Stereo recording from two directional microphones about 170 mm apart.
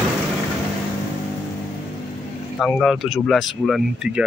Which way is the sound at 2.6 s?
Centre (ahead or behind).